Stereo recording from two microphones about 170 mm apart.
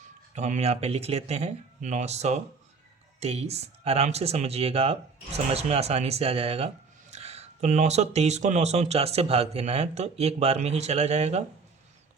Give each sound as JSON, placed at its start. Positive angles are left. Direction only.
{"t": 0.3, "sound": "speech", "side_deg": -40}